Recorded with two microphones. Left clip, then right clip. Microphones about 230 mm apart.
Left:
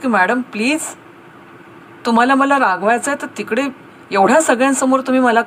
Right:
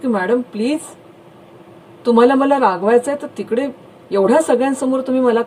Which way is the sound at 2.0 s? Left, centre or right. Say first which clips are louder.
Right 1 dB; left.